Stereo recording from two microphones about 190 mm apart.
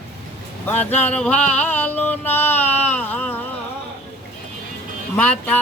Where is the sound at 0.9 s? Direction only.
5° left (ahead or behind).